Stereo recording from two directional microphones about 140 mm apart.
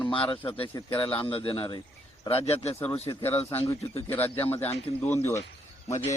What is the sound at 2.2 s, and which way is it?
Speech, 45° left (ahead or behind).